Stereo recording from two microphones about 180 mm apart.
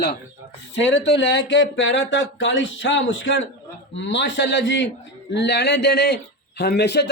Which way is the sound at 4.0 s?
80° left.